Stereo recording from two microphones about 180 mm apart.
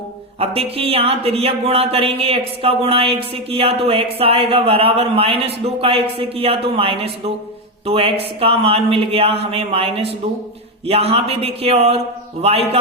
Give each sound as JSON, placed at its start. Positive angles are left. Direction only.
{"t": 0.3, "sound": "speech", "side_deg": -30}